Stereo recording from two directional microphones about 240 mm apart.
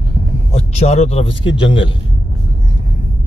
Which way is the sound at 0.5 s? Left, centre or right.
Left.